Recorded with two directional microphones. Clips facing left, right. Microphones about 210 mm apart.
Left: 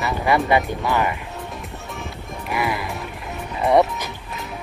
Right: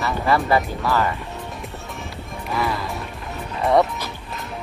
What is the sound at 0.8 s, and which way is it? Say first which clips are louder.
Speech: even; 15° left (ahead or behind).